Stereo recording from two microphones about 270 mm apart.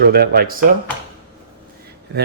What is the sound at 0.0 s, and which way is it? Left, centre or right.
Speech, right.